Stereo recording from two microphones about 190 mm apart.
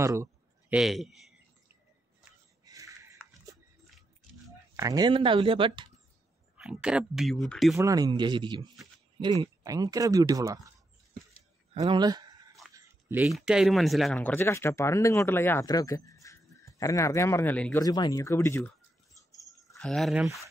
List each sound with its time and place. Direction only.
0.0 s a sound: 15° right (ahead or behind)
0.7 s speech: centre (ahead or behind)
2.6 s a sound: 15° right (ahead or behind)
4.7 s speech: 20° right (ahead or behind)
6.5 s speech: 5° right (ahead or behind)
7.7 s speech: 15° right (ahead or behind)
11.7 s speech: 30° right (ahead or behind)
12.0 s speech: 20° right (ahead or behind)
13.2 s speech: 5° right (ahead or behind)
17.7 s speech: 20° left (ahead or behind)
19.7 s speech: centre (ahead or behind)